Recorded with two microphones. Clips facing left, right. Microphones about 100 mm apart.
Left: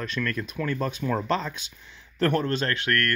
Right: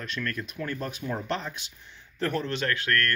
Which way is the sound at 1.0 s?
90° left.